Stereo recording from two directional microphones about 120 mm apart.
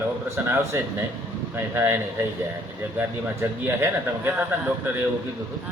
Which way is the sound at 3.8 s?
20° right (ahead or behind).